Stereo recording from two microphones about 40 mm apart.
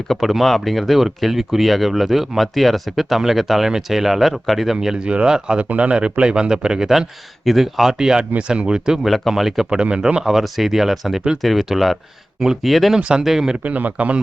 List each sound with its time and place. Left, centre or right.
0.2 s speech: centre
4.9 s speech: right
5.5 s speech: right
9.0 s speech: centre
9.6 s speech: right
10.2 s speech: centre
13.0 s speech: right
13.2 s speech: centre
13.6 s a man's voice: right